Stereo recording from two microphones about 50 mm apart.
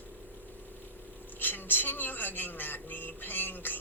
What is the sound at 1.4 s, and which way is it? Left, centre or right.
Speech, left.